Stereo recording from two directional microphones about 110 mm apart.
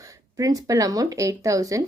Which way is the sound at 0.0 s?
30° right (ahead or behind).